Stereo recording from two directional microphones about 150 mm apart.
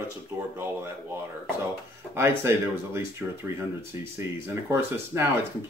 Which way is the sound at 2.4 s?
15° right (ahead or behind).